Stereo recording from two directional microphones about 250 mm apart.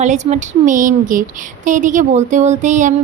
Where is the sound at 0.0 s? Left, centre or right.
Right.